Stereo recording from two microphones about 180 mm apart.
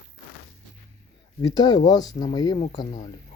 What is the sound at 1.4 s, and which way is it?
Speech, 20° left (ahead or behind).